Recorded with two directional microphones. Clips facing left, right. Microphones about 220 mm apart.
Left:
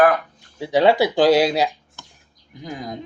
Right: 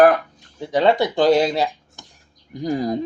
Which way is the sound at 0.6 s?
5° left (ahead or behind).